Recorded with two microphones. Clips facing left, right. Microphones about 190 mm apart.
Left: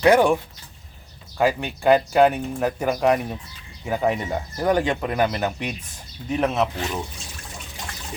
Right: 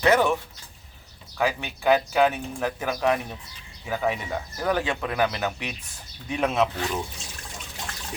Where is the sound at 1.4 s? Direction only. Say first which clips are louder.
Left 5 dB; 15° left (ahead or behind).